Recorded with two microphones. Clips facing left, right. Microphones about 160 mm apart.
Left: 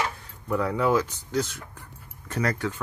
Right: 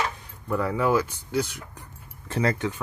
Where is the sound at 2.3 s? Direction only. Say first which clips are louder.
Right 2 dB; 25° right (ahead or behind).